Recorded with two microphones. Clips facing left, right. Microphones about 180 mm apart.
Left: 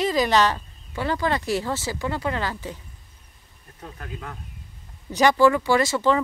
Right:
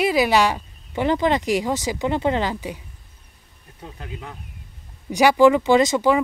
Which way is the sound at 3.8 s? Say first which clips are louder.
Right 1 dB; 15° right (ahead or behind).